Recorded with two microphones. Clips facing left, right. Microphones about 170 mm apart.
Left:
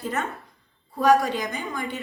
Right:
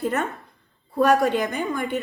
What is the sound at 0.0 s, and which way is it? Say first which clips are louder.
Speech: right 4 dB; 60° right (ahead or behind).